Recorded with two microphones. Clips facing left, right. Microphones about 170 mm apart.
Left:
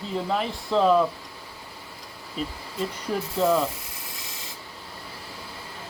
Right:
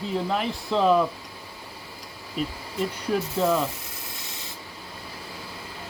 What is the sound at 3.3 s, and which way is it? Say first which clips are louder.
Speech: left 2 dB; 5° right (ahead or behind).